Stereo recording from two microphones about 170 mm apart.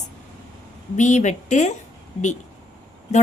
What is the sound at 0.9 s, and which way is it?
Speech, 45° left (ahead or behind).